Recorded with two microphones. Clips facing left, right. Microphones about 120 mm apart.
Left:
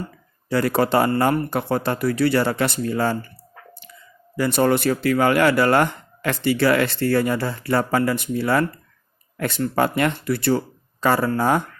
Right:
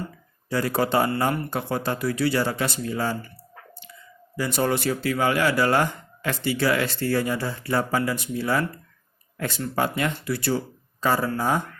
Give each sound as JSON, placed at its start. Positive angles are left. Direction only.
{"t": 0.5, "sound": "speech", "side_deg": 65}
{"t": 4.4, "sound": "speech", "side_deg": 60}